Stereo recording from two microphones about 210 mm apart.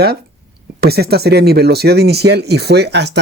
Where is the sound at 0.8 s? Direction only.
50° right (ahead or behind).